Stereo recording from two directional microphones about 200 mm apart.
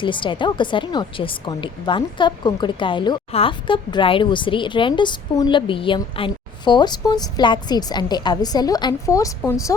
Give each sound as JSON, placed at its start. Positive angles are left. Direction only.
{"t": 0.0, "sound": "a woman's voice", "side_deg": 25}